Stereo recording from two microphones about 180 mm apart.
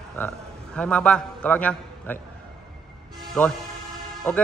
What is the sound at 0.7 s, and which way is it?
A man's voice, 5° left (ahead or behind).